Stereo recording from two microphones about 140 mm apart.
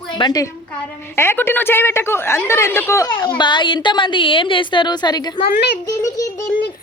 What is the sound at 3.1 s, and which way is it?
A woman's voice, 35° left (ahead or behind).